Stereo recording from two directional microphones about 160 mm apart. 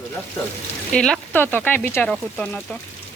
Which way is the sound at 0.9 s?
5° left (ahead or behind).